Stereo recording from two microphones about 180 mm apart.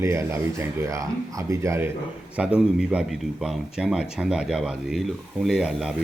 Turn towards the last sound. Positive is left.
turn(degrees=-5)  # may be behind; listen again after turning